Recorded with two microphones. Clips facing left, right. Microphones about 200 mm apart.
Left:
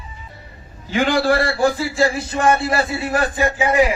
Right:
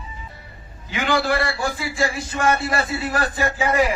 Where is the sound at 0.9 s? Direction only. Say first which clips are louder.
Left 4 dB; 45° left (ahead or behind); by 3.9 s 15° left (ahead or behind).